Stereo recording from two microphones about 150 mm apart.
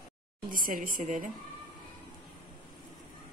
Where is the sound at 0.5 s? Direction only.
65° right (ahead or behind).